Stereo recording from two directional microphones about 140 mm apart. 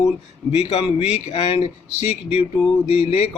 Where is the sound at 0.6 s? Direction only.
50° left (ahead or behind).